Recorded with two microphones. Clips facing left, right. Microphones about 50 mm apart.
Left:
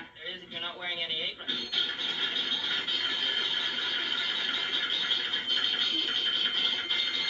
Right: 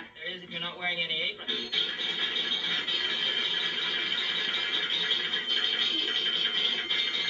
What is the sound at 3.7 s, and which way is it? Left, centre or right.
Squeal, centre.